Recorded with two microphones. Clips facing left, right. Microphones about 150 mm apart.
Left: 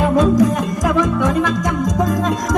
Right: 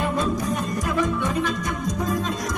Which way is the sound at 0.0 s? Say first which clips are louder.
Left 11 dB; 90° left.